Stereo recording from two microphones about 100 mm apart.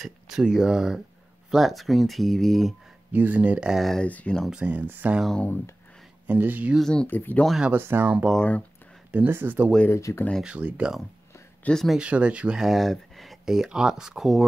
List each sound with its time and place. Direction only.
0.0 s speech: 5° right (ahead or behind)
3.1 s speech: 15° right (ahead or behind)
4.0 s speech: 15° left (ahead or behind)
4.5 s speech: 10° right (ahead or behind)
5.3 s speech: 15° left (ahead or behind)
6.2 s speech: 15° right (ahead or behind)
6.8 s speech: 10° left (ahead or behind)
7.1 s speech: 20° left (ahead or behind)
7.4 s speech: 5° right (ahead or behind)
7.7 s speech: 20° right (ahead or behind)
9.8 s speech: 25° left (ahead or behind)
10.4 s speech: 10° right (ahead or behind)
11.6 s speech: 5° left (ahead or behind)
12.0 s speech: 10° right (ahead or behind)